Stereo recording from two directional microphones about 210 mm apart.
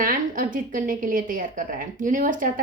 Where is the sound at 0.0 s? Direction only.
40° right (ahead or behind).